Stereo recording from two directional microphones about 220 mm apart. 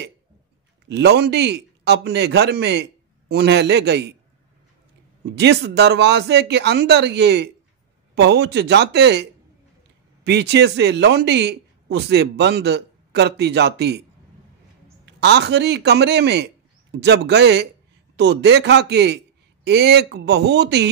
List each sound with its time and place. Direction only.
0.8 s speech: 50° right (ahead or behind)
5.3 s speech: 50° right (ahead or behind)
15.0 s speech: 50° right (ahead or behind)